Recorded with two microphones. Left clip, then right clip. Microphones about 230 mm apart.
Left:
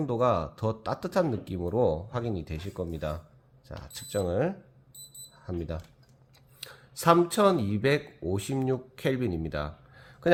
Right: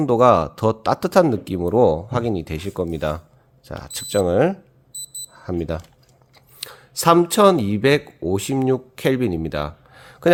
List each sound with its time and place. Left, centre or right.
0.0 s speech: right